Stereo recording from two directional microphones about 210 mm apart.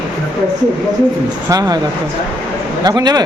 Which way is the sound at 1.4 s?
15° right (ahead or behind).